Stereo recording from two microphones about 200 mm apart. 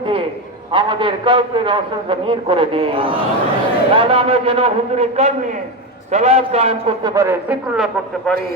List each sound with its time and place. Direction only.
0.7 s a man's voice: 25° right (ahead or behind); by 7.9 s 5° right (ahead or behind)